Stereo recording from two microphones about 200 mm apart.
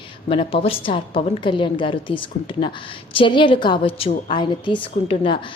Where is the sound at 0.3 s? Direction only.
25° left (ahead or behind).